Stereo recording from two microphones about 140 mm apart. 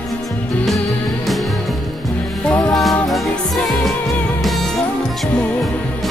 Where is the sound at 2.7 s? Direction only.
Centre (ahead or behind).